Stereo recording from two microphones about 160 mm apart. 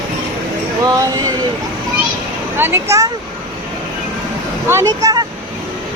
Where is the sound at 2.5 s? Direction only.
15° right (ahead or behind).